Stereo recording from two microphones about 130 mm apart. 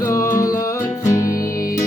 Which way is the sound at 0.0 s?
20° left (ahead or behind).